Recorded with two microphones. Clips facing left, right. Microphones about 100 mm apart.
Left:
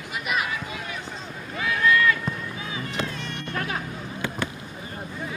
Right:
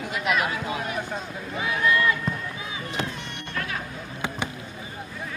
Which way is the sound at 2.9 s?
20° right (ahead or behind).